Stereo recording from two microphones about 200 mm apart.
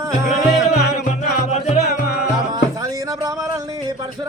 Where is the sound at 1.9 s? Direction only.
50° left (ahead or behind).